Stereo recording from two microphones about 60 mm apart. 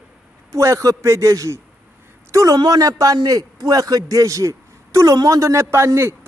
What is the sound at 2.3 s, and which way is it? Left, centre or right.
A man's voice, right.